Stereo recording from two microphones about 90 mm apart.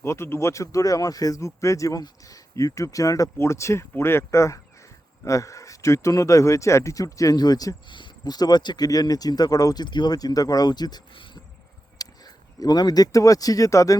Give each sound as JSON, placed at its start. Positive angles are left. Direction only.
{"t": 0.0, "sound": "speech", "side_deg": 30}
{"t": 7.9, "sound": "speech", "side_deg": 60}